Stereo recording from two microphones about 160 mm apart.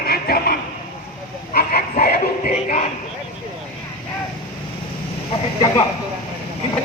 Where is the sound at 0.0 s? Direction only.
75° left (ahead or behind).